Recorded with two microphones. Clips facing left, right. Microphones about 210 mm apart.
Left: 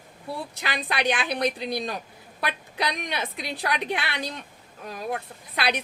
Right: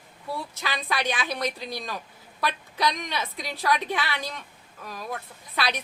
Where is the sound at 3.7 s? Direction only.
15° left (ahead or behind).